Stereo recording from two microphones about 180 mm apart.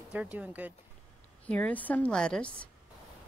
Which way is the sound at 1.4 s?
5° left (ahead or behind).